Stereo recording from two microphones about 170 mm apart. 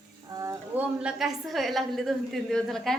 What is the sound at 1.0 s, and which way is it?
Speech, 5° right (ahead or behind).